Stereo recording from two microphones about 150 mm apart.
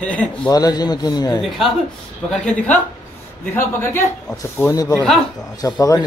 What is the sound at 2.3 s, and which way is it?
A man's voice, 5° left (ahead or behind).